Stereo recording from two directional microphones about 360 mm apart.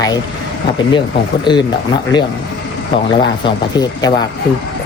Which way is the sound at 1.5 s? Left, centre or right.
Centre.